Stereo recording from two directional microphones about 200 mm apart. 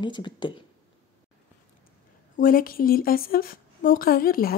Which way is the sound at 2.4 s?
45° left (ahead or behind).